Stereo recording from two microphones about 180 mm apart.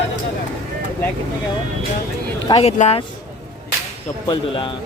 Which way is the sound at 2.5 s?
35° left (ahead or behind).